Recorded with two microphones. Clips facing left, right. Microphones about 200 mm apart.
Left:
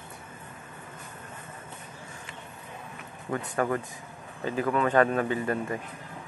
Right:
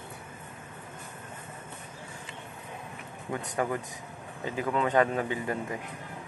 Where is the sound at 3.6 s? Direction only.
15° right (ahead or behind).